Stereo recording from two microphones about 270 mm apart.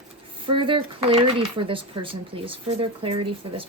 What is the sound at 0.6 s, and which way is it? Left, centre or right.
Speech, centre.